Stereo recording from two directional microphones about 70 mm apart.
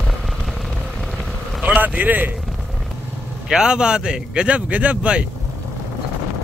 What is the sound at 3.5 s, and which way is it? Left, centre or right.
Speech, centre.